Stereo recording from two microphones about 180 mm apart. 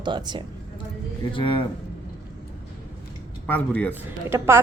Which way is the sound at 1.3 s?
25° left (ahead or behind).